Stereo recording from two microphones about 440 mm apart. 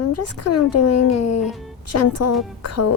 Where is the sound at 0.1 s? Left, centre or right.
Left.